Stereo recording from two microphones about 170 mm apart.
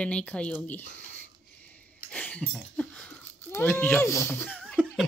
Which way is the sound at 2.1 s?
10° left (ahead or behind).